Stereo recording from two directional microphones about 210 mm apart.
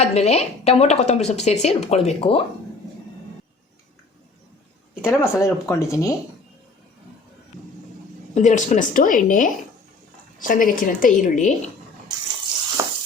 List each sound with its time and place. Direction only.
0.0 s a woman's voice: 30° left (ahead or behind)
5.0 s speech: 15° left (ahead or behind)
8.4 s a woman's voice: 35° left (ahead or behind)
12.8 s sizzle: 15° right (ahead or behind)